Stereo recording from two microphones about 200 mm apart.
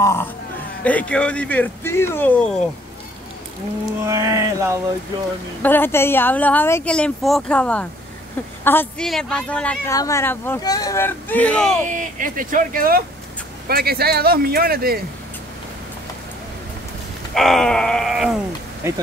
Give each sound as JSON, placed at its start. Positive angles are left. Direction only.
{"t": 0.0, "sound": "a woman's voice", "side_deg": 15}
{"t": 4.0, "sound": "speech", "side_deg": -15}
{"t": 5.6, "sound": "a woman's voice", "side_deg": 10}
{"t": 11.8, "sound": "speech", "side_deg": -40}
{"t": 17.3, "sound": "a woman's voice", "side_deg": 0}